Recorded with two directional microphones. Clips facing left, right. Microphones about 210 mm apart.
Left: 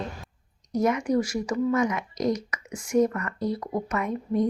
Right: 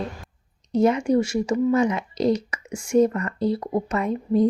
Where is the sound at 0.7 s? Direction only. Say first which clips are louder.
Right 5 dB; 30° right (ahead or behind).